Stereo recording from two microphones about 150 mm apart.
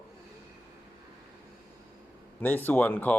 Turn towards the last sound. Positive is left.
turn(degrees=10)  # may be behind; listen again after turning